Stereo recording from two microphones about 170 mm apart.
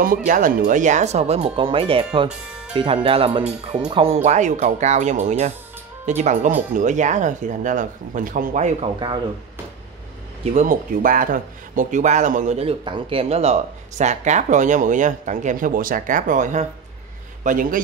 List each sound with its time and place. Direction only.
0.7 s speech: 45° right (ahead or behind)
10.5 s a man's voice: 50° right (ahead or behind)